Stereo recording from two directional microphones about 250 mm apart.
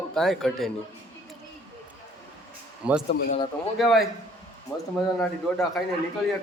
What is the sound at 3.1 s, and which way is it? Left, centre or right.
Speech, left.